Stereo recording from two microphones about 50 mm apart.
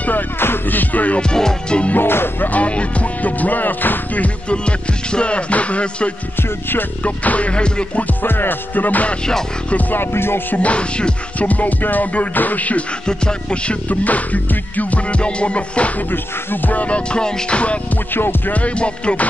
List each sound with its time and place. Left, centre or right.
0.4 s music: left
1.3 s music: centre
2.0 s music: left
2.5 s music: left
8.2 s music: left
9.9 s music: left
10.6 s music: left
11.3 s music: left
13.0 s music: centre